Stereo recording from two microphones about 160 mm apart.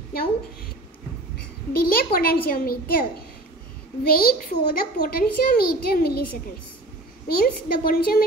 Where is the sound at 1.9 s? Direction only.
65° left (ahead or behind).